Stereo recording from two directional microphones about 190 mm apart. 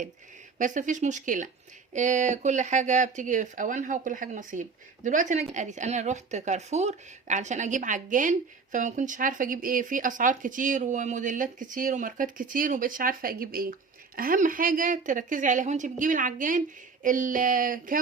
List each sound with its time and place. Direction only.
0.6 s speech: 40° right (ahead or behind)